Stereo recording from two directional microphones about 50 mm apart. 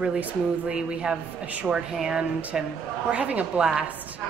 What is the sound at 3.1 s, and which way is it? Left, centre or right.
Speech, right.